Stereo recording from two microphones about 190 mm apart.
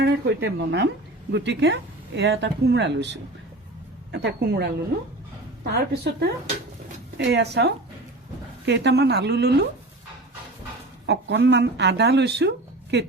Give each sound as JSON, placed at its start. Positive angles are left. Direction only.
{"t": 0.0, "sound": "speech", "side_deg": -60}
{"t": 5.7, "sound": "speech", "side_deg": -60}
{"t": 11.0, "sound": "speech", "side_deg": -65}